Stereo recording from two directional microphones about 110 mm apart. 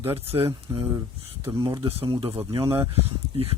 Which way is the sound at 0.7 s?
30° right (ahead or behind).